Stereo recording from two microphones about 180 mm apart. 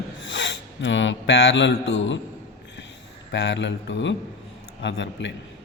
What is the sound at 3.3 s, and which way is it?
Speech, 80° left.